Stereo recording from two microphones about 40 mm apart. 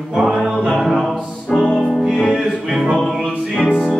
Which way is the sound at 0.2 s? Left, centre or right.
Centre.